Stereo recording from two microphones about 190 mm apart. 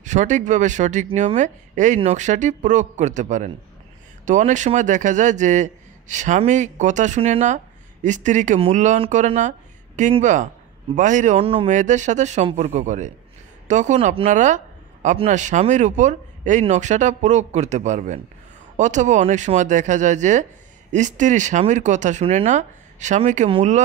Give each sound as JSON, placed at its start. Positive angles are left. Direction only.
{"t": 0.0, "sound": "a man's voice", "side_deg": -40}